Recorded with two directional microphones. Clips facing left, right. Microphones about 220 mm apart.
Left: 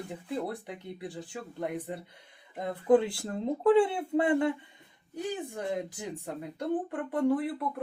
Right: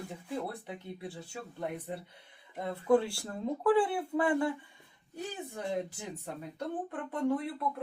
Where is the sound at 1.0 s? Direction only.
15° left (ahead or behind).